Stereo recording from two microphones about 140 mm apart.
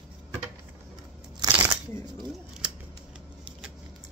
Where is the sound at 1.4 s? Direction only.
25° right (ahead or behind).